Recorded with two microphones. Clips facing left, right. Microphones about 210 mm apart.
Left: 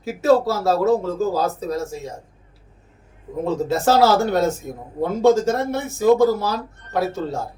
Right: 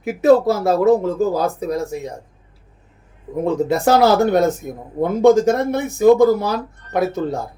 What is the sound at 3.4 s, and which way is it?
Speech, 15° right (ahead or behind).